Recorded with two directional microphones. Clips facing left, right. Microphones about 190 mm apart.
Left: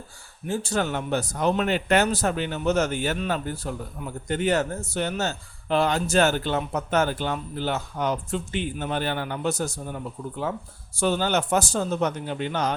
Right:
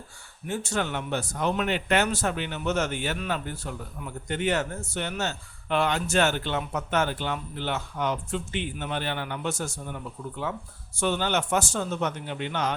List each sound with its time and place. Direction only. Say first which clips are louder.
0.4 s a man's voice: left 3 dB; 35° left (ahead or behind)